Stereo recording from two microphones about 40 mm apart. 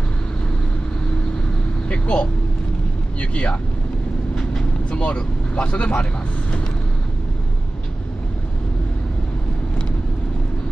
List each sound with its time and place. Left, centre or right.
1.9 s vehicle: left
3.2 s speech: left
4.9 s speech: left